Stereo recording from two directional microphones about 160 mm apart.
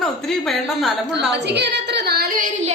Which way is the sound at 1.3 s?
90° right.